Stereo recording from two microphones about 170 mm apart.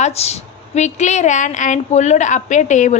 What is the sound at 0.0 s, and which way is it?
A woman's voice, 40° left (ahead or behind).